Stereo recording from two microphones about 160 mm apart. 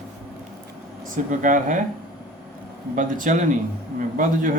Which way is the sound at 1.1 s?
55° right (ahead or behind).